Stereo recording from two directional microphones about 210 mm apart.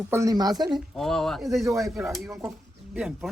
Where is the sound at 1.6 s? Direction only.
15° right (ahead or behind).